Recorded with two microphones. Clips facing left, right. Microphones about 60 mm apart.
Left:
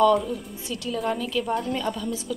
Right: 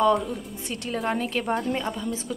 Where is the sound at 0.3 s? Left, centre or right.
Right.